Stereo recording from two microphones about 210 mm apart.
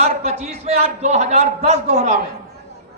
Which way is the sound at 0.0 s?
30° right (ahead or behind).